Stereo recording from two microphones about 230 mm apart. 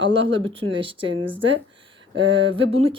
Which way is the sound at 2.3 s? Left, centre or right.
Right.